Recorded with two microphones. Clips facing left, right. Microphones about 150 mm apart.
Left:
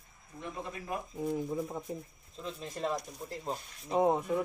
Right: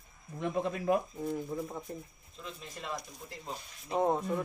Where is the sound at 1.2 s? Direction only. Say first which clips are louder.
Left 2 dB; 10° left (ahead or behind).